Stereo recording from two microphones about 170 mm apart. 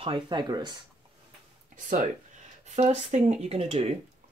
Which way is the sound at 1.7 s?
50° right (ahead or behind).